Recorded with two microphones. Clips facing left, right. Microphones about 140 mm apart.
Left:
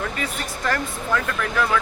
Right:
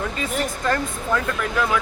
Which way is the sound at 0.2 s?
25° right (ahead or behind).